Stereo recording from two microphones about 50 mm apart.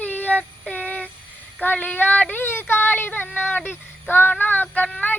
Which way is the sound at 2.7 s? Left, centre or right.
Left.